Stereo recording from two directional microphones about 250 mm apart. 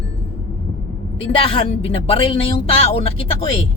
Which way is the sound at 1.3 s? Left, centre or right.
Left.